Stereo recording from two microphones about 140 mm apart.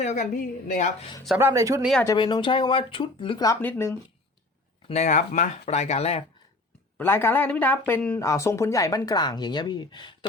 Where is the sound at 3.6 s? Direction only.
15° left (ahead or behind).